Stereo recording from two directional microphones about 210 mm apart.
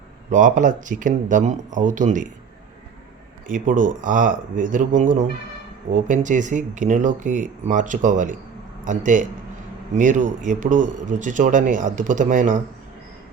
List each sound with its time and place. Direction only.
0.3 s speech: 40° right (ahead or behind)
3.4 s a man's voice: 40° right (ahead or behind)